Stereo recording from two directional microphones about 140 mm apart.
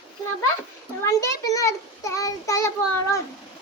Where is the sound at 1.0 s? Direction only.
25° left (ahead or behind).